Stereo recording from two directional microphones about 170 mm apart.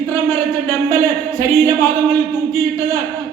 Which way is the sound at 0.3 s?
15° left (ahead or behind).